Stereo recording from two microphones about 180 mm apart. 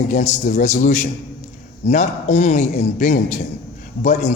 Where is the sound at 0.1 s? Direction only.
45° left (ahead or behind).